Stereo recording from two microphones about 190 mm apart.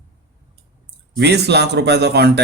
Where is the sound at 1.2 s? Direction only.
60° right (ahead or behind).